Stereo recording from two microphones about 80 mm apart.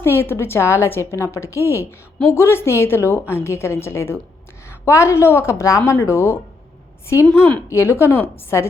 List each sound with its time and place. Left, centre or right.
0.0 s a woman's voice: left
7.7 s a woman's voice: left